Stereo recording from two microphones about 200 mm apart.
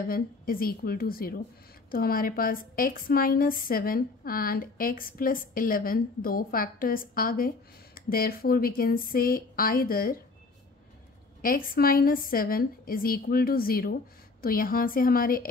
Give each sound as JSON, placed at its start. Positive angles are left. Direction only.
{"t": 0.0, "sound": "a woman's voice", "side_deg": 45}
{"t": 11.4, "sound": "a woman's voice", "side_deg": 45}